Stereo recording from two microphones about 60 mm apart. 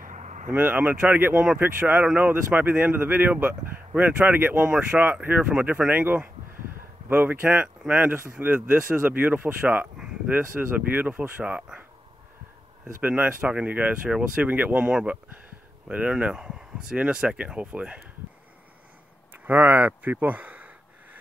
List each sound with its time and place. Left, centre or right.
0.5 s speech: right
5.9 s speech: right
10.6 s speech: centre
11.0 s speech: right
11.4 s speech: centre
12.8 s speech: right
19.4 s a sound: right